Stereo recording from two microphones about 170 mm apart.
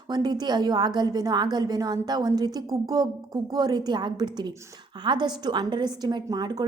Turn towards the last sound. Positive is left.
turn(degrees=-25)  # may be behind; listen again after turning